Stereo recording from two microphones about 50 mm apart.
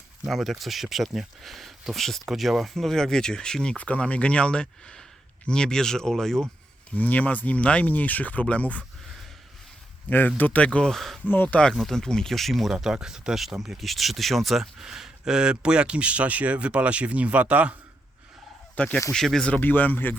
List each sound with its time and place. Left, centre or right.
0.3 s speech: centre
2.2 s speech: centre
2.7 s speech: centre
3.8 s speech: left; by 6.5 s centre
6.9 s speech: left
10.2 s speech: left
10.8 s speech: centre
11.4 s speech: centre
11.7 s speech: centre
12.7 s speech: centre; by 17.7 s right
18.8 s speech: left
19.1 s speech: centre
19.5 s speech: left